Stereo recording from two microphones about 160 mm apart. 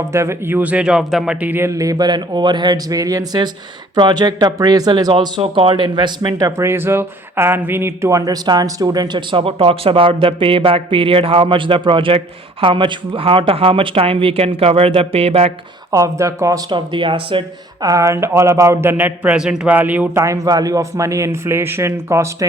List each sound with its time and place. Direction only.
0.1 s speech: 15° right (ahead or behind); by 15.5 s 40° right (ahead or behind)
15.9 s speech: 20° right (ahead or behind)
17.8 s speech: 20° right (ahead or behind)